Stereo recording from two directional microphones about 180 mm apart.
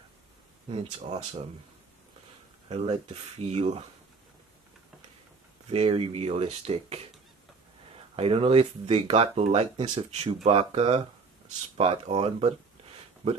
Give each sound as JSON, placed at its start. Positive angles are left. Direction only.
{"t": 0.7, "sound": "speech", "side_deg": -30}
{"t": 2.7, "sound": "speech", "side_deg": -35}
{"t": 5.7, "sound": "speech", "side_deg": -35}
{"t": 8.2, "sound": "speech", "side_deg": -30}